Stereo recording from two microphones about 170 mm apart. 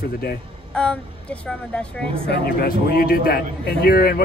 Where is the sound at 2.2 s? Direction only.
70° left (ahead or behind).